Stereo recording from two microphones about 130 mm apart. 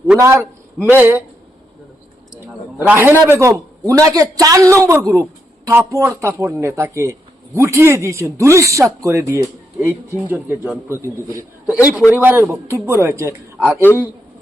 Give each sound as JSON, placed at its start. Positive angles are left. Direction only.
{"t": 0.2, "sound": "a man's voice", "side_deg": -20}
{"t": 2.8, "sound": "a man's voice", "side_deg": -15}
{"t": 11.6, "sound": "a man's voice", "side_deg": -10}